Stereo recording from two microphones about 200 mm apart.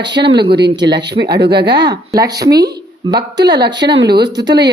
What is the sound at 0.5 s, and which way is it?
Speech, 55° right (ahead or behind).